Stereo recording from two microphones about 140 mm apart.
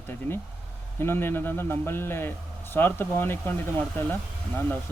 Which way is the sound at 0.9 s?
15° left (ahead or behind).